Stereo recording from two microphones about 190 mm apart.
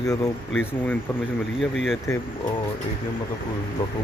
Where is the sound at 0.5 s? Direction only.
Centre (ahead or behind).